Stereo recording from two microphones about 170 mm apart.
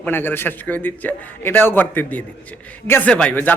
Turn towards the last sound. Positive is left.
turn(degrees=10)  # may be behind; listen again after turning